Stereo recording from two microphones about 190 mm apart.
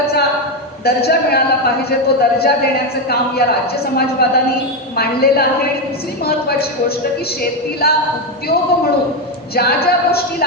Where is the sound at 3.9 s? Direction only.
55° left (ahead or behind).